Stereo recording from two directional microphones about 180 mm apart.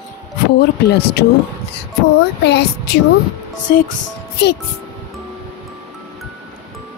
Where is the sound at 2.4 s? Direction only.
70° left (ahead or behind).